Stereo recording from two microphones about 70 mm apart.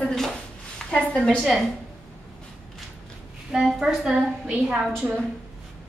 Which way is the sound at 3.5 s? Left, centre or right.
Centre.